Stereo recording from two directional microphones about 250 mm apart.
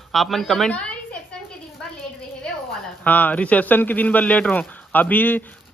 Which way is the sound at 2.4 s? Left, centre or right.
Centre.